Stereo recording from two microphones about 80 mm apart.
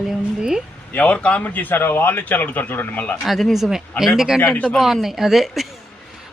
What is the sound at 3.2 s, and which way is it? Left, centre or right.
Speech, centre.